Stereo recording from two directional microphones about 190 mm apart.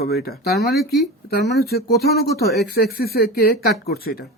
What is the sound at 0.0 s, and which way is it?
Speech, 55° left (ahead or behind).